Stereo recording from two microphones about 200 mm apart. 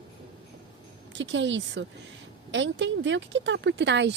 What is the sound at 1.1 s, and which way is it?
A woman's voice, 65° right (ahead or behind).